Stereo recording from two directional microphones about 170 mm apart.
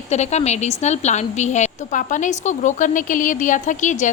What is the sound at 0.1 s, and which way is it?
A woman's voice, 40° left (ahead or behind).